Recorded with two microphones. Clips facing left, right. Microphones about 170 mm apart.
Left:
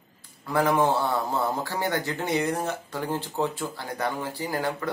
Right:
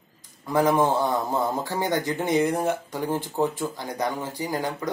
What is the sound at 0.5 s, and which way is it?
A man's voice, 15° right (ahead or behind).